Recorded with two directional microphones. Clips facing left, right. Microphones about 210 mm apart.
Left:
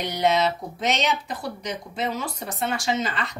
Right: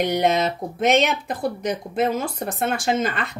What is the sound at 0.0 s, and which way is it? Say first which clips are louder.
Speech: right 2 dB; 55° right (ahead or behind).